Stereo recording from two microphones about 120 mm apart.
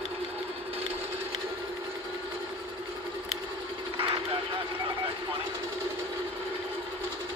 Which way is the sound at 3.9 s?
45° right (ahead or behind).